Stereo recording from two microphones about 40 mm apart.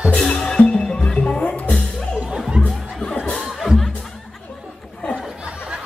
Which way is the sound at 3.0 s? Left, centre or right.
Centre.